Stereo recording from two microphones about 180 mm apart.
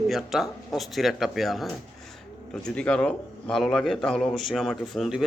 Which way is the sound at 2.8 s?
5° left (ahead or behind).